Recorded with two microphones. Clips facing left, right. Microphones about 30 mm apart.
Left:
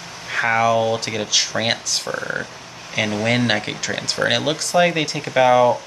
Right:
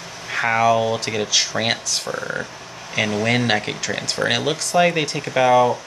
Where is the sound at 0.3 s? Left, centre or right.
Centre.